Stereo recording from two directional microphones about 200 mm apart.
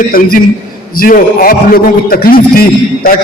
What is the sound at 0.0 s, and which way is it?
A man's voice, 45° left (ahead or behind).